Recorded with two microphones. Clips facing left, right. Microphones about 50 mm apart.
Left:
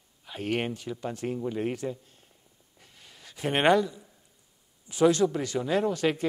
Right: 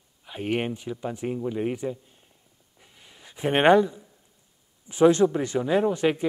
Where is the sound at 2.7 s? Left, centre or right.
Centre.